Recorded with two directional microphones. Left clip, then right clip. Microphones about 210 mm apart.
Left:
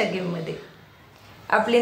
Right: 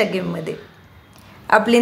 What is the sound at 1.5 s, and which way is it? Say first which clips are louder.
Speech: right 6 dB; 50° right (ahead or behind).